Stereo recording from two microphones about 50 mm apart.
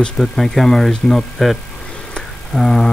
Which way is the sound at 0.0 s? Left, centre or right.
Centre.